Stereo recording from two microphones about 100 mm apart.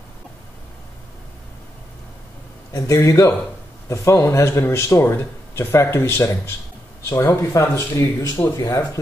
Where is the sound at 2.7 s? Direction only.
35° left (ahead or behind).